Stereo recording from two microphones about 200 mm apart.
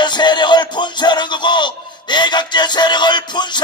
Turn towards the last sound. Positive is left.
turn(degrees=20)  # may be behind; listen again after turning